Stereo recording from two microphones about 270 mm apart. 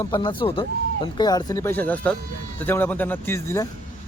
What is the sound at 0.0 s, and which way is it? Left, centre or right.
Speech, centre.